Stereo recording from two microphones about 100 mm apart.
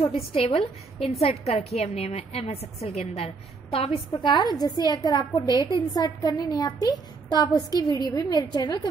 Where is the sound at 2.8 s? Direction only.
80° left.